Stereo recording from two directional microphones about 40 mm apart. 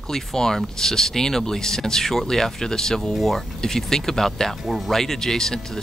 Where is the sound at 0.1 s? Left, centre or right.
Centre.